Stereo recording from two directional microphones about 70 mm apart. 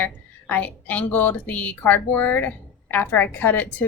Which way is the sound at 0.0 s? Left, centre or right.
Left.